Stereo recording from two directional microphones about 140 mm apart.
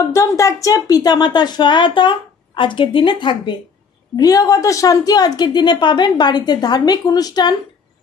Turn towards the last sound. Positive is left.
turn(degrees=30)  # may be behind; listen again after turning